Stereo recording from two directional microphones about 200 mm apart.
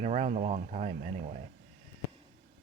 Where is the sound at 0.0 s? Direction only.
35° right (ahead or behind).